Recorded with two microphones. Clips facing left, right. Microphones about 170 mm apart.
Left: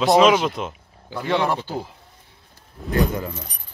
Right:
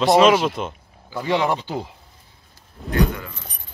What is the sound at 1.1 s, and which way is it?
Speech, 15° right (ahead or behind).